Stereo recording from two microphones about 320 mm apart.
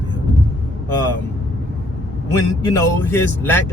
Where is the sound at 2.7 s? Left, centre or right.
Centre.